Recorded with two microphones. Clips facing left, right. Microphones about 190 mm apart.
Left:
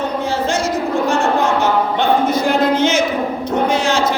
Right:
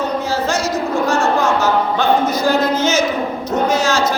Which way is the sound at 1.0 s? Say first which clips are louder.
Right 1 dB; 55° left (ahead or behind).